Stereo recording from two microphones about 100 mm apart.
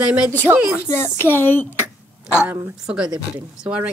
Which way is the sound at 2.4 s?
20° right (ahead or behind).